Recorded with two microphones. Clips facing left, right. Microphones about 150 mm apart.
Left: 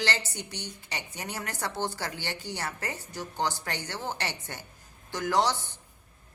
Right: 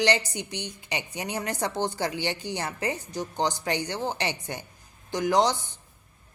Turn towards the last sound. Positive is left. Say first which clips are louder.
# right 4 dB
turn(degrees=-15)  # may be behind; listen again after turning